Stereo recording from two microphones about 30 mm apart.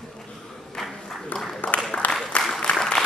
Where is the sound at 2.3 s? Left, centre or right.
Left.